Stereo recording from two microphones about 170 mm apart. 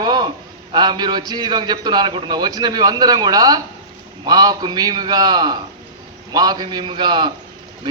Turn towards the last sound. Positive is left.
turn(degrees=-25)  # may be behind; listen again after turning